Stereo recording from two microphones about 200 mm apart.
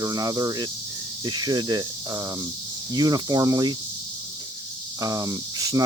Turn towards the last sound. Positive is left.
turn(degrees=-20)  # may be behind; listen again after turning